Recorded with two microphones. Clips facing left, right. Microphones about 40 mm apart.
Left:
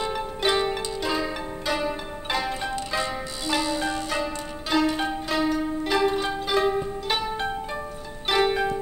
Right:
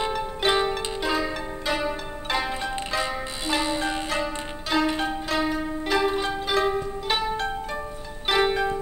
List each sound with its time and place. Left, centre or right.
0.1 s zither: centre
3.0 s music: centre
3.6 s music: right
4.1 s pizzicato: centre
4.9 s music: centre
8.3 s pizzicato: centre